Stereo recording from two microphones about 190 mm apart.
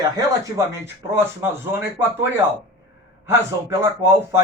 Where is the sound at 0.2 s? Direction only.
15° right (ahead or behind).